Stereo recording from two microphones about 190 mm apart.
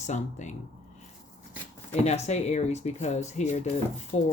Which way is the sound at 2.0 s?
35° left (ahead or behind).